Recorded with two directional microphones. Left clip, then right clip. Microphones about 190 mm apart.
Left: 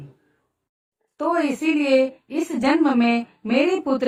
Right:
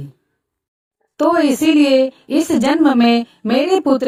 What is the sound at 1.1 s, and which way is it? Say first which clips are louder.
A woman's voice: right 8 dB; 40° right (ahead or behind).